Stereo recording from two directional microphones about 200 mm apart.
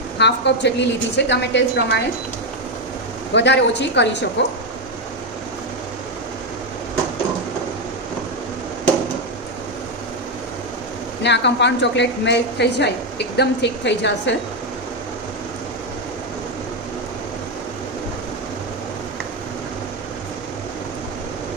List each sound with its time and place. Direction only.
0.2 s a woman's voice: 60° left (ahead or behind)
3.3 s a woman's voice: 60° left (ahead or behind)
11.2 s a woman's voice: 60° left (ahead or behind)